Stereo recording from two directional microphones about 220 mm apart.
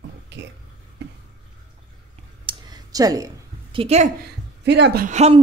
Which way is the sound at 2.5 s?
15° right (ahead or behind).